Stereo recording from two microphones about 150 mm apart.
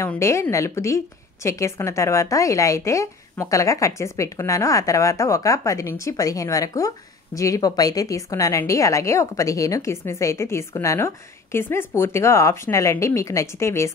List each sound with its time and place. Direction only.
0.0 s a woman's voice: 15° left (ahead or behind)